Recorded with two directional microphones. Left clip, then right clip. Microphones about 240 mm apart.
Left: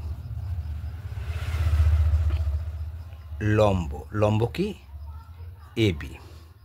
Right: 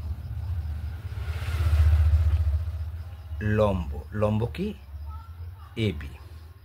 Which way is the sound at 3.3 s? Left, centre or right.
Left.